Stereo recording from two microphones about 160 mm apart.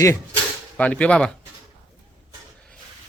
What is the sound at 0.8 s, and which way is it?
Speech, 10° left (ahead or behind).